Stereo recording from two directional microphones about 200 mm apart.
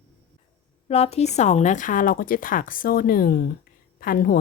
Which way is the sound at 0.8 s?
30° left (ahead or behind).